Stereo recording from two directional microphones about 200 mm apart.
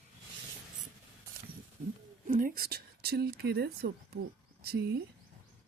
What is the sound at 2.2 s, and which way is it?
Speech, 45° right (ahead or behind).